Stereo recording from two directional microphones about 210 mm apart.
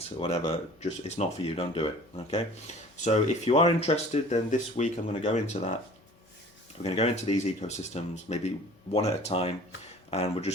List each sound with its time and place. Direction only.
0.2 s speech: 25° left (ahead or behind)
6.8 s speech: 30° left (ahead or behind)